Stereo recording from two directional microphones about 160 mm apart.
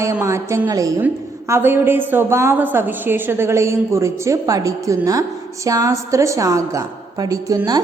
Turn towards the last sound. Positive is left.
turn(degrees=-20)  # may be behind; listen again after turning